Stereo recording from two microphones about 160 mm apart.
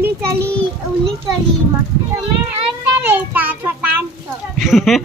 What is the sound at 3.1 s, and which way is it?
Speech, 10° right (ahead or behind).